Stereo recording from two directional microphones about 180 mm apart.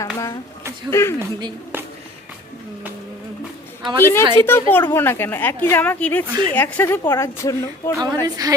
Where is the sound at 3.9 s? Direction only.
10° left (ahead or behind).